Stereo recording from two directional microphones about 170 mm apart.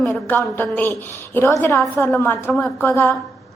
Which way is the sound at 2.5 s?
Centre (ahead or behind).